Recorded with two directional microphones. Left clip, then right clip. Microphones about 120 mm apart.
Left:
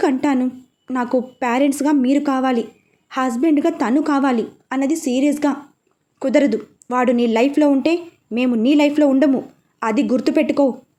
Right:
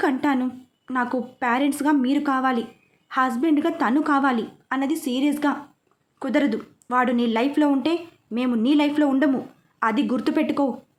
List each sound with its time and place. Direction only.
0.0 s a woman's voice: 20° left (ahead or behind)
1.0 s a woman's voice: 20° left (ahead or behind)